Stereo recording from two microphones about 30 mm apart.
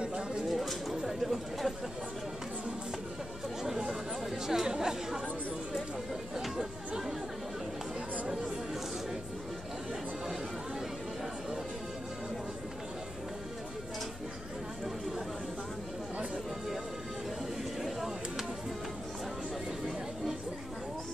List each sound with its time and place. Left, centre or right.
0.0 s bird: right
0.5 s a sound: centre
1.2 s speech: centre
3.6 s chatter: centre
4.6 s chatter: right
6.3 s chatter: centre